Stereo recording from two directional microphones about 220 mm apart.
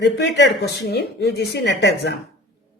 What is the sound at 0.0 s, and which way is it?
A woman's voice, 50° left (ahead or behind).